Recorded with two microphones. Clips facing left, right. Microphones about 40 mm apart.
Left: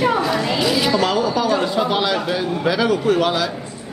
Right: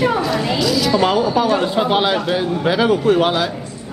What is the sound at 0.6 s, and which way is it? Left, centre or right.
Speech, left.